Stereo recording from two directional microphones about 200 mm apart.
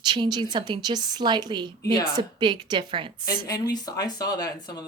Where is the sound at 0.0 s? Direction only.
20° right (ahead or behind).